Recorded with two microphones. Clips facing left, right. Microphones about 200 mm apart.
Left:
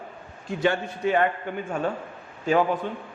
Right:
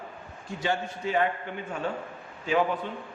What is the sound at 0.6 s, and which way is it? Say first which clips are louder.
Speech: left 6 dB; 60° left (ahead or behind).